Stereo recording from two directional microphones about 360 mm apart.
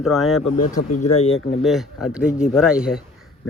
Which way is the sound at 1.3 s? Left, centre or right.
Centre.